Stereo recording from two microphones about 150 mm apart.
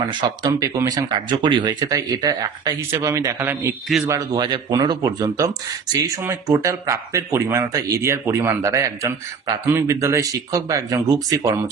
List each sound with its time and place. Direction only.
0.1 s speech: 30° right (ahead or behind)